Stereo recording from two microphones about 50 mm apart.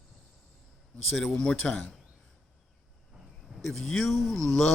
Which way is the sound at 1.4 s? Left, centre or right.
Centre.